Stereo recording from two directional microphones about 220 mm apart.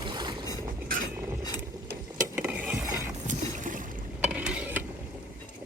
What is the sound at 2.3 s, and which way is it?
Stir, 5° right (ahead or behind).